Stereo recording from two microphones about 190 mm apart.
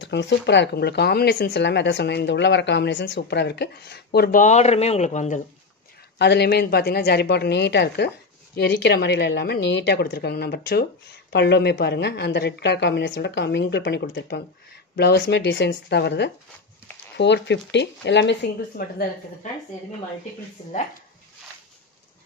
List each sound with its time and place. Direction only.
0.0 s speech: 65° left (ahead or behind); by 5.4 s 40° left (ahead or behind)
6.1 s speech: 60° left (ahead or behind)